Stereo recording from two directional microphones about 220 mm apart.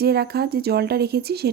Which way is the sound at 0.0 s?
45° right (ahead or behind).